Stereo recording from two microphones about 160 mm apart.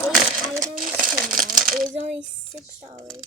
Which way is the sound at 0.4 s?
25° right (ahead or behind).